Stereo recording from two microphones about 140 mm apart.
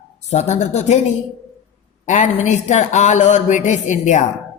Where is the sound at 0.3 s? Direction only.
55° left (ahead or behind).